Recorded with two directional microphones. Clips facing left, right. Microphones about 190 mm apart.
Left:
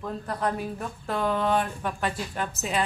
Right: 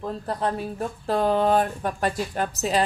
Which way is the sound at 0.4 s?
35° right (ahead or behind).